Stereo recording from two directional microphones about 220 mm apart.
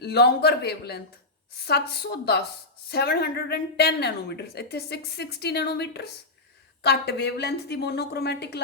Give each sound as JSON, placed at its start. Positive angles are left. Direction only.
{"t": 0.0, "sound": "a woman's voice", "side_deg": 50}